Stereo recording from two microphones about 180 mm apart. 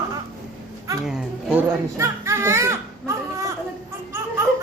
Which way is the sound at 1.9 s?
15° right (ahead or behind).